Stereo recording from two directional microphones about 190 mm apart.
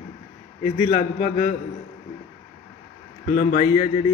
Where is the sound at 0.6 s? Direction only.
35° left (ahead or behind).